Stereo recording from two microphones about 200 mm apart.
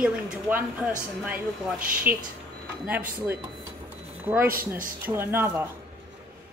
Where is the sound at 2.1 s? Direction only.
10° right (ahead or behind).